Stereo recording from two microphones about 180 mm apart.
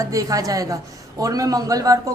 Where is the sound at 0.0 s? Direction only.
20° right (ahead or behind).